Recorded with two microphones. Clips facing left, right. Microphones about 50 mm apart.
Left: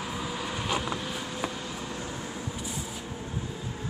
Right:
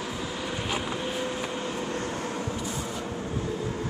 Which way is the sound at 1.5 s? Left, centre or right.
Right.